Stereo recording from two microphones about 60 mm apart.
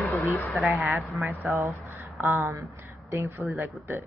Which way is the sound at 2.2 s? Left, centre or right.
Right.